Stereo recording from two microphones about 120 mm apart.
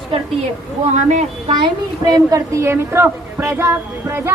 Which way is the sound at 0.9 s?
70° right (ahead or behind).